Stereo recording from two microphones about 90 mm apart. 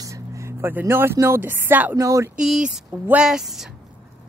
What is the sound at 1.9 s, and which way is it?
Speech, 35° right (ahead or behind).